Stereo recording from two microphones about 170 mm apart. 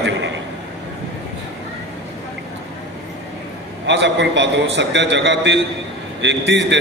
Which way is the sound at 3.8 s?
90° right.